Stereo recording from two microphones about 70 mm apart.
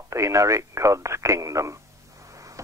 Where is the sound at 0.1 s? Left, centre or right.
Right.